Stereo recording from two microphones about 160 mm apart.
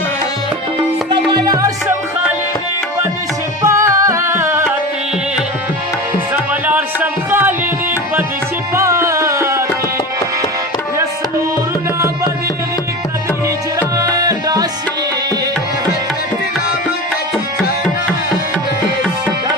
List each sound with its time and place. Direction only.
1.3 s music: 25° right (ahead or behind)
3.6 s music: 20° right (ahead or behind)
6.3 s music: 10° right (ahead or behind)
8.7 s music: 20° right (ahead or behind)
13.7 s music: 20° right (ahead or behind)